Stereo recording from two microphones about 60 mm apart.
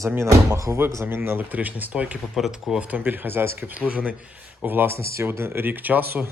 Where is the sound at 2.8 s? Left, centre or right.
Right.